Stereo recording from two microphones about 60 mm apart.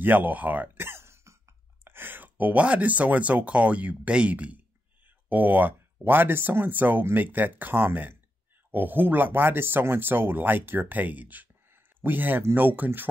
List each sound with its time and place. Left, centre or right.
0.0 s speech: right
0.8 s cough: right
1.9 s speech: right